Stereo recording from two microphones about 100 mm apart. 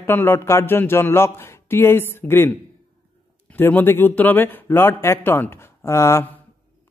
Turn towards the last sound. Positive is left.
turn(degrees=25)  # may be behind; listen again after turning